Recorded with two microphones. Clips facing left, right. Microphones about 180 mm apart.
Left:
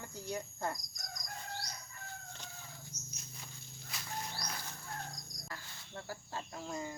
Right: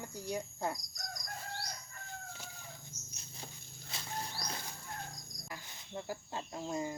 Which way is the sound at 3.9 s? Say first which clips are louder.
Right 1 dB; 30° right (ahead or behind).